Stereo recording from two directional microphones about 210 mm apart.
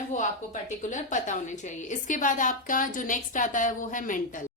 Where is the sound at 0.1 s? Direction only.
35° left (ahead or behind).